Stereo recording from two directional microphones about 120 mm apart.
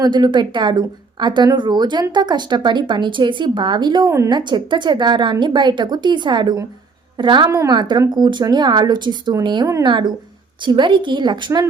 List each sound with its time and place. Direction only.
0.0 s speech: 40° right (ahead or behind)
7.5 s speech: 25° right (ahead or behind)
7.8 s a woman's voice: 40° right (ahead or behind)